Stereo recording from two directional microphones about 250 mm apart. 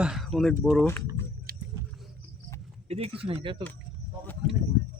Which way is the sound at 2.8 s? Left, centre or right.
Right.